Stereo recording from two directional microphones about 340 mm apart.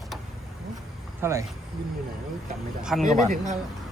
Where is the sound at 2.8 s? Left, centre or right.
Centre.